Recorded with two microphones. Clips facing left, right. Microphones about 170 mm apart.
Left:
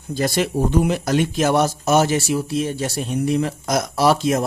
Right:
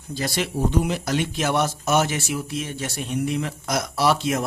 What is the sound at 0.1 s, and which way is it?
Speech, 45° left (ahead or behind).